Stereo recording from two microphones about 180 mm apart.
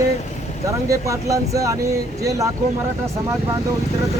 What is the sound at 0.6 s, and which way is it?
Speech, 15° right (ahead or behind).